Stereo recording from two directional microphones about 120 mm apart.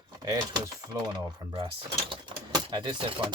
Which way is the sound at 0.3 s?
35° right (ahead or behind).